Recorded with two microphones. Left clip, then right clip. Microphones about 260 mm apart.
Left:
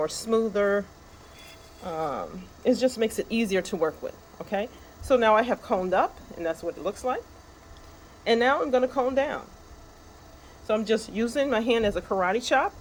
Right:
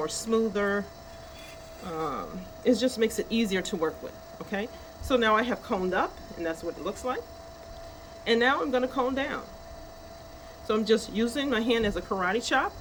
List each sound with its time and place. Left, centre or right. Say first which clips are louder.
0.0 s speech: left 2 dB; centre
1.9 s speech: left 3 dB; centre
8.2 s speech: left 2 dB; left
10.7 s speech: even; centre